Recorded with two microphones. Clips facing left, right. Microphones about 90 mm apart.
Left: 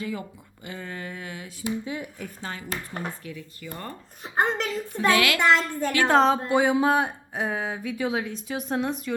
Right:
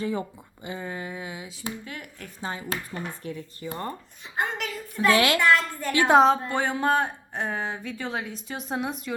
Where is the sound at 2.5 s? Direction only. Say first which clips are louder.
Right 4 dB; 20° right (ahead or behind).